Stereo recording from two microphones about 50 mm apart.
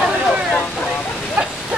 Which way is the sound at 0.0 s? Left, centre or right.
Centre.